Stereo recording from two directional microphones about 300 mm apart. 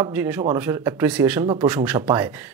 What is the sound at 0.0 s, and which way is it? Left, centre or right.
Speech, centre.